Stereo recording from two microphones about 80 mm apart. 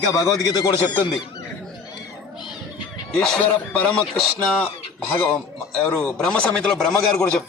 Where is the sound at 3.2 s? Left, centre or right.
Centre.